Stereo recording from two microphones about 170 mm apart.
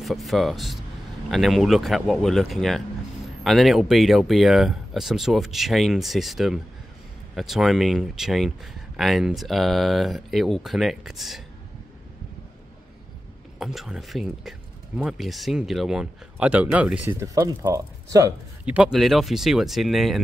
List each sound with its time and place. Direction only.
0.0 s speech: centre (ahead or behind)
13.6 s speech: centre (ahead or behind)
17.2 s speech: 20° right (ahead or behind)
18.7 s speech: 5° right (ahead or behind)